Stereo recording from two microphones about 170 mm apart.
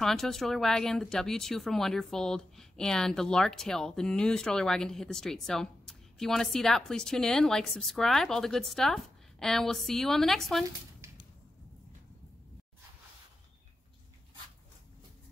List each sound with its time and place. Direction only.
0.0 s speech: centre (ahead or behind)
11.0 s arrow: 15° right (ahead or behind)